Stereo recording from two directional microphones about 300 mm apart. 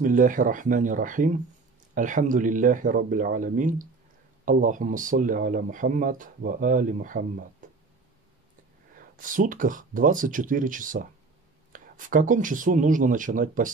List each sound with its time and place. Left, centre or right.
0.0 s speech: right
9.1 s speech: right